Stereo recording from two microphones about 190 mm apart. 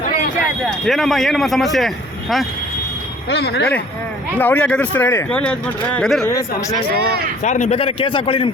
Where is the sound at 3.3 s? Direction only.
60° left (ahead or behind).